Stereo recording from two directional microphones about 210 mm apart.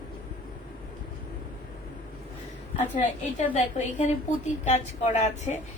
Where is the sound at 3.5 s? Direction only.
35° left (ahead or behind).